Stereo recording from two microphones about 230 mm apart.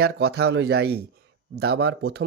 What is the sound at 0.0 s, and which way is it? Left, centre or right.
Speech, right.